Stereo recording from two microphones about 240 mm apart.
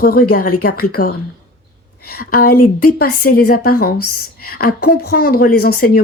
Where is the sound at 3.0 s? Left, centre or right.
Left.